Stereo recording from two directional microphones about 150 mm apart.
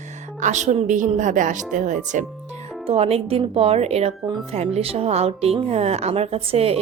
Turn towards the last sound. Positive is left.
turn(degrees=-40)  # may be behind; listen again after turning